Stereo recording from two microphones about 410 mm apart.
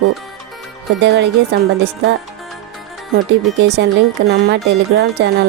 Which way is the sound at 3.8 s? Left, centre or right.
Right.